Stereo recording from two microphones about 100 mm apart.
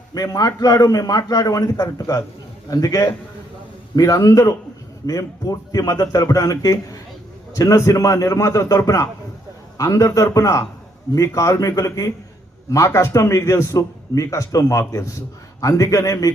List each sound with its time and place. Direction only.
0.1 s a man's voice: 40° left (ahead or behind)